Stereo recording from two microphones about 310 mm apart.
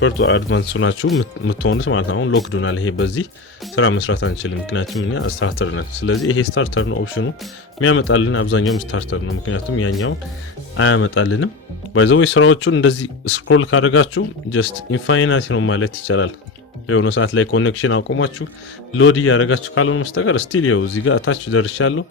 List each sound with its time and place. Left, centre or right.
0.0 s speech: left